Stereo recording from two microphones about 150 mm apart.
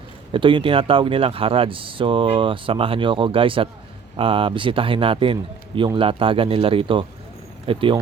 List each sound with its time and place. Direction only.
0.3 s speech: 35° right (ahead or behind)